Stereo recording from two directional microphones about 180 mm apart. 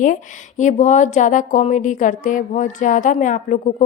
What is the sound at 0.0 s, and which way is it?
A woman's voice, 45° left (ahead or behind).